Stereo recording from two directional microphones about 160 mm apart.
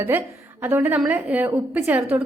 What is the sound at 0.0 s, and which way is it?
A woman's voice, 10° right (ahead or behind).